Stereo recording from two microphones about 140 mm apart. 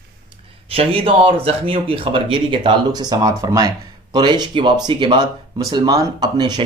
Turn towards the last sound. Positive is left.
turn(degrees=-30)  # may be behind; listen again after turning